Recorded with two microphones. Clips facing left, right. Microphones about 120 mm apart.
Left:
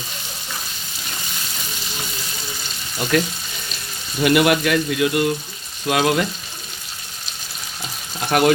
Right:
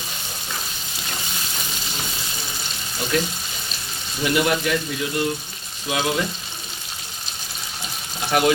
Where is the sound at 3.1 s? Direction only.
60° left (ahead or behind).